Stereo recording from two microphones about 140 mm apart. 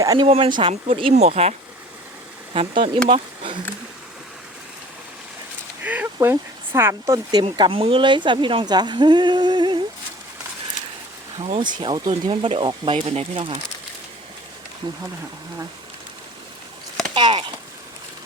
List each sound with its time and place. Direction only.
0.0 s speech: 25° right (ahead or behind)
0.3 s speech: 40° right (ahead or behind)
2.5 s speech: 40° right (ahead or behind)
5.8 s a sound: 10° right (ahead or behind)
6.1 s speech: 20° right (ahead or behind)
7.4 s speech: 40° right (ahead or behind)
11.3 s speech: 45° right (ahead or behind)
11.6 s speech: 30° right (ahead or behind)
17.2 s speech: 35° right (ahead or behind)